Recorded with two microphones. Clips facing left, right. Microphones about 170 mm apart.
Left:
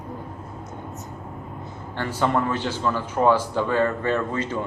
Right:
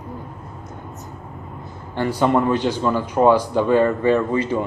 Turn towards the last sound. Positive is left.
turn(degrees=-10)  # may be behind; listen again after turning